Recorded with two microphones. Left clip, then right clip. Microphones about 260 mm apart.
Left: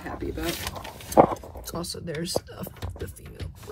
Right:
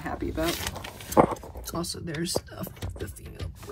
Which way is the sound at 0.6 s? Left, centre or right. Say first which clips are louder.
Even; right.